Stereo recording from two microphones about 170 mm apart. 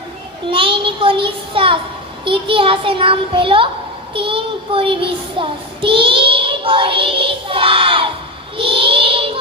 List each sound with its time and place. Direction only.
0.5 s a child's voice: 30° right (ahead or behind)
8.5 s child singing: 30° right (ahead or behind)